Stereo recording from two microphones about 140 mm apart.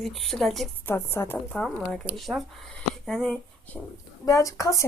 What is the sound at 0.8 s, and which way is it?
Speech, 20° left (ahead or behind).